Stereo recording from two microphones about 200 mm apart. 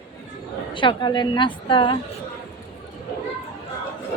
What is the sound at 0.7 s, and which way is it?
A woman's voice, 25° left (ahead or behind).